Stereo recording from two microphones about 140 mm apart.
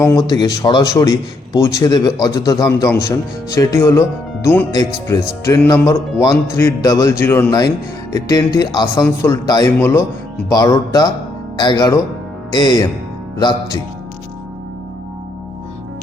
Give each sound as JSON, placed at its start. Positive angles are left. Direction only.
{"t": 0.0, "sound": "speech", "side_deg": 20}
{"t": 9.0, "sound": "speech", "side_deg": 15}
{"t": 9.5, "sound": "speech", "side_deg": 25}